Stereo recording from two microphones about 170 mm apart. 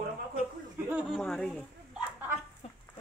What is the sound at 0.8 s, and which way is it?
Speech, 5° right (ahead or behind).